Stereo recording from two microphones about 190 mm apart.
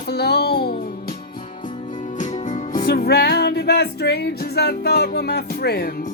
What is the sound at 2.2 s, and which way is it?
Music, 40° left (ahead or behind).